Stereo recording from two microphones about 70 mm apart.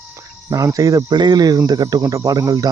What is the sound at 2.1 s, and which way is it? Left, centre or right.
Speech, right.